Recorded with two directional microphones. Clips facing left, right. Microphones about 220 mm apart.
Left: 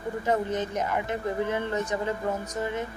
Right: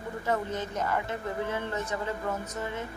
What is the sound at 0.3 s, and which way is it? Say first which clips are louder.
A woman's voice: left 4 dB; 20° left (ahead or behind).